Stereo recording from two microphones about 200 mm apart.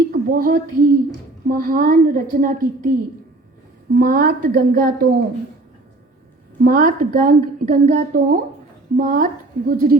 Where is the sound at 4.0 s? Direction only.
50° right (ahead or behind).